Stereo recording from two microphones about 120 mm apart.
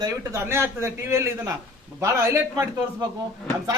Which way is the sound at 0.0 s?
20° right (ahead or behind).